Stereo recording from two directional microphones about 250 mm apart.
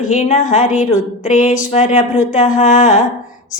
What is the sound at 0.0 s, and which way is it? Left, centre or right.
Music, left.